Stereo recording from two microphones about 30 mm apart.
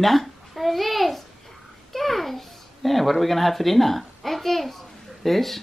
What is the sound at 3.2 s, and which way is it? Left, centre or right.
A child's voice, centre.